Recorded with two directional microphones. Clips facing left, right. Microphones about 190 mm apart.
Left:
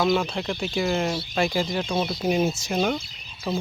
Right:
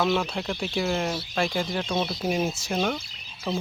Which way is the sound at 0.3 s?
Centre (ahead or behind).